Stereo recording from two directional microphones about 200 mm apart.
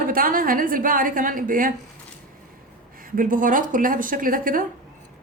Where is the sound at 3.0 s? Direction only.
45° right (ahead or behind).